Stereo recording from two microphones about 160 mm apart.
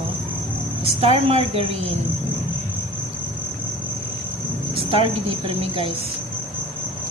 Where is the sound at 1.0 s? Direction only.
40° right (ahead or behind).